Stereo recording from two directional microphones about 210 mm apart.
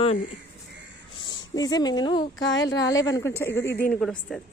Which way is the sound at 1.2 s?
20° left (ahead or behind).